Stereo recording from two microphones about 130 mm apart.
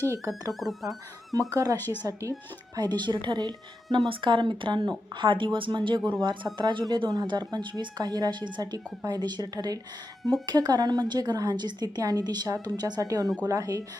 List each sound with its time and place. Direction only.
0.0 s speech: 25° right (ahead or behind)
0.6 s speech: centre (ahead or behind)
1.3 s speech: 25° right (ahead or behind)
1.8 s speech: 15° left (ahead or behind)
2.7 s speech: 35° right (ahead or behind)